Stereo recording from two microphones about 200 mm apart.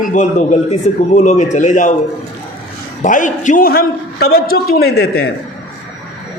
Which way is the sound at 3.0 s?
40° left (ahead or behind).